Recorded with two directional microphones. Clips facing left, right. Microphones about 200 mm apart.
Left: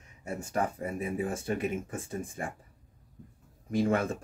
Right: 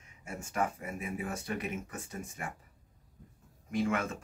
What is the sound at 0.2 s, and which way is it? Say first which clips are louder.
Speech: left 3 dB; 35° left (ahead or behind).